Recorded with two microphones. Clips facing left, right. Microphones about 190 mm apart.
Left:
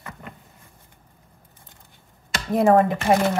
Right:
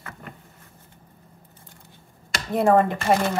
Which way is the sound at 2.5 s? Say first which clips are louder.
Left 2 dB; centre (ahead or behind).